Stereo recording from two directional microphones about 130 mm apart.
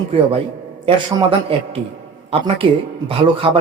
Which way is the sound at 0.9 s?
45° right (ahead or behind).